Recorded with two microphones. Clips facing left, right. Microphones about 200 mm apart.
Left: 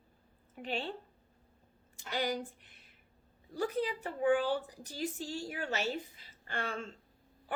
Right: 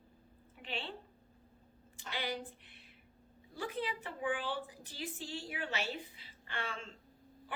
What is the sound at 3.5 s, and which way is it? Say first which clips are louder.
A woman's voice: left 6 dB; 40° left (ahead or behind).